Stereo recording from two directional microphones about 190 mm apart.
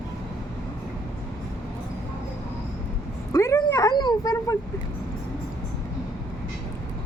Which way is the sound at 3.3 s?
15° left (ahead or behind).